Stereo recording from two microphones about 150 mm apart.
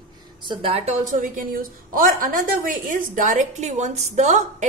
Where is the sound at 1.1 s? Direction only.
60° right (ahead or behind).